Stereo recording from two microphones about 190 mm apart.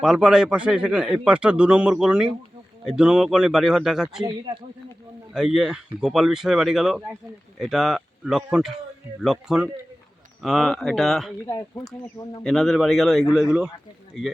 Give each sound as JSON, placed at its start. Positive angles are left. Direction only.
{"t": 0.0, "sound": "a man's voice", "side_deg": -5}
{"t": 5.3, "sound": "a man's voice", "side_deg": -5}
{"t": 11.4, "sound": "speech", "side_deg": 15}
{"t": 12.4, "sound": "a man's voice", "side_deg": 0}